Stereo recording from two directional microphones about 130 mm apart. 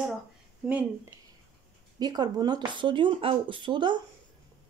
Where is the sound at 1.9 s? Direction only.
30° right (ahead or behind).